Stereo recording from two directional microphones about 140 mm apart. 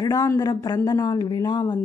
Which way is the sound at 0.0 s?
25° left (ahead or behind).